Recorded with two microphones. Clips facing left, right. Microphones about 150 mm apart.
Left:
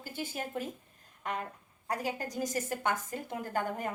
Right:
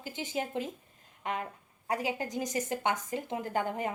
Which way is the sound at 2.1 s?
20° right (ahead or behind).